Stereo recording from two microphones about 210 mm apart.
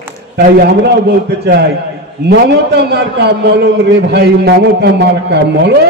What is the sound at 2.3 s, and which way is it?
A man's voice, 50° right (ahead or behind).